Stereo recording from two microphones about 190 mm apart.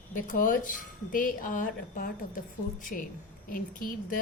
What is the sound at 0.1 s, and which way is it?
Speech, 45° left (ahead or behind).